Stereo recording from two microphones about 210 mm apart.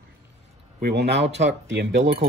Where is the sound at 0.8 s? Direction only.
50° right (ahead or behind).